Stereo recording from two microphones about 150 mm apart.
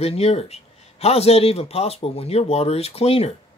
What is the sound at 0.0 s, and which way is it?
Speech, 45° left (ahead or behind).